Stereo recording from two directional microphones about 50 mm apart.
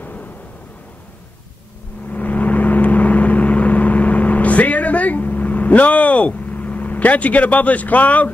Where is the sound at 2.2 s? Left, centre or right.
Left.